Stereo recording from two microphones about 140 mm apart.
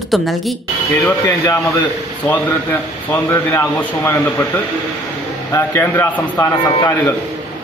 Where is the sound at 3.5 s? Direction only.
15° left (ahead or behind).